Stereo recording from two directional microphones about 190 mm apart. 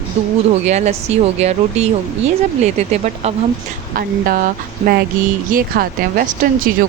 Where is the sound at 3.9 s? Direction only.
50° right (ahead or behind).